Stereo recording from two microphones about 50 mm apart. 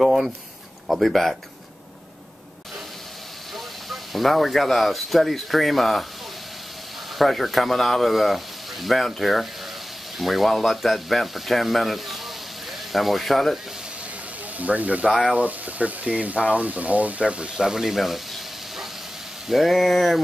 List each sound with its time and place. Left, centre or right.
0.0 s speech: centre
3.5 s speech: centre
7.2 s speech: centre
14.6 s speech: right; by 20.2 s centre